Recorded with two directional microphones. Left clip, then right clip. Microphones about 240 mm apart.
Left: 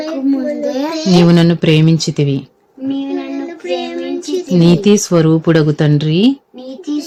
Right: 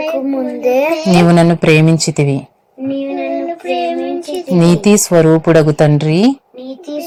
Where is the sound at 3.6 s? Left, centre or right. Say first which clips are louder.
Right 2 dB; right.